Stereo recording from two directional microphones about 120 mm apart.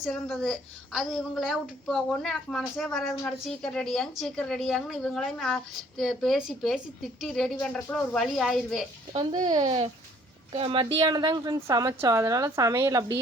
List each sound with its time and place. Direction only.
0.0 s a woman's voice: centre (ahead or behind)
9.1 s speech: 35° right (ahead or behind)
9.6 s a woman's voice: 50° right (ahead or behind)
10.9 s a woman's voice: 35° right (ahead or behind)